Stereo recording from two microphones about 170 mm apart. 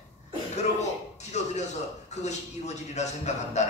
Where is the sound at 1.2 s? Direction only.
40° left (ahead or behind).